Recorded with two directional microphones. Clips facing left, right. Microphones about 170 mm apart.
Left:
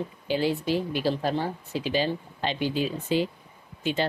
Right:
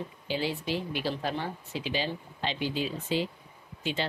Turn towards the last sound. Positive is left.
turn(degrees=50)  # may be behind; listen again after turning